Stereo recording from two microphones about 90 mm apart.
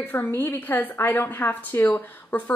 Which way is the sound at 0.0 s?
20° left (ahead or behind).